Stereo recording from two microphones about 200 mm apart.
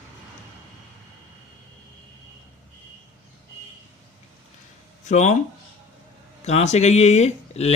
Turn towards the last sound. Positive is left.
turn(degrees=35)  # may be behind; listen again after turning